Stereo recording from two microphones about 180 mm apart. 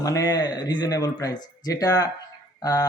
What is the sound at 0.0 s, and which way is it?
Speech, 20° left (ahead or behind).